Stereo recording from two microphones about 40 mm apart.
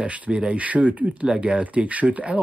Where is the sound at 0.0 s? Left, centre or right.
Right.